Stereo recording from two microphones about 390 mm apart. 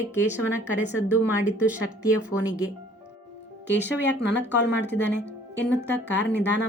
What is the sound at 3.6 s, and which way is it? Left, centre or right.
Speech, left.